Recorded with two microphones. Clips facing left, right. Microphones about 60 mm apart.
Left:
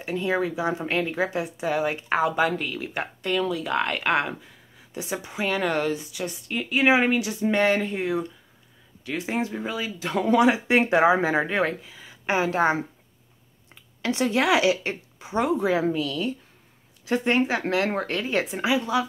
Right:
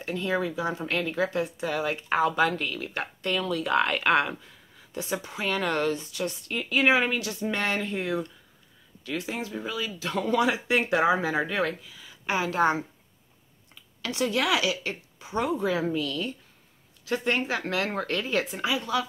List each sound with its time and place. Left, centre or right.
0.0 s speech: centre
9.0 s speech: left
14.0 s speech: left
15.9 s speech: centre
17.0 s speech: left